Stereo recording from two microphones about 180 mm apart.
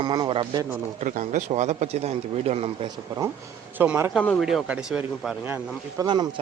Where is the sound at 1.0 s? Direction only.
45° right (ahead or behind).